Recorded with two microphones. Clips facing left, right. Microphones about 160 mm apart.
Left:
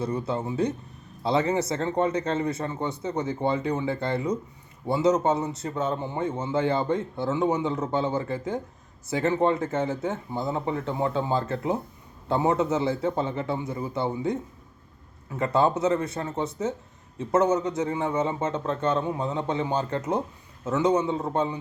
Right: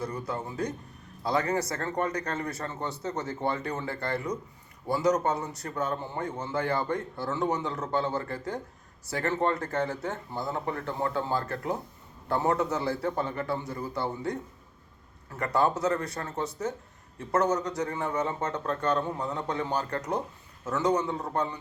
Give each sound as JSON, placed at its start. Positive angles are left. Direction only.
{"t": 0.0, "sound": "a man's voice", "side_deg": 25}